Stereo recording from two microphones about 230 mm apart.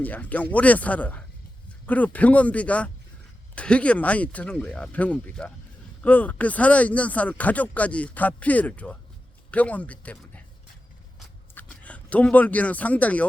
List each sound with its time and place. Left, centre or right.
0.0 s speech: centre
11.5 s speech: centre